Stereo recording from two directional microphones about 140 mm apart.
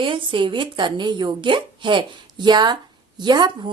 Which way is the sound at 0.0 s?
35° right (ahead or behind).